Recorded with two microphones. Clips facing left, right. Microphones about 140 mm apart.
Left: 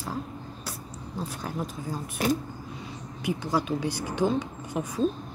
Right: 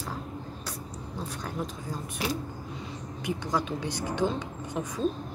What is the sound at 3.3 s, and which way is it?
A woman's voice, 10° left (ahead or behind).